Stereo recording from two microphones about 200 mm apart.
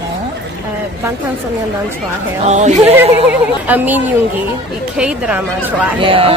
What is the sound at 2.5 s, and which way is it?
Speech, 35° right (ahead or behind).